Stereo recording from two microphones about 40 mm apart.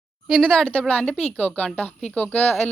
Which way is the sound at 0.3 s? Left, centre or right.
Centre.